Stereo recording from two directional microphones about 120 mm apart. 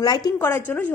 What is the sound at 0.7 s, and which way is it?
Speech, 15° left (ahead or behind).